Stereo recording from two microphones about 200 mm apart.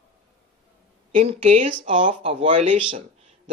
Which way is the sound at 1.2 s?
35° right (ahead or behind).